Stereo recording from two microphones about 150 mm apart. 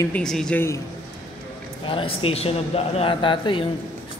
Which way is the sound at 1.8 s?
35° left (ahead or behind).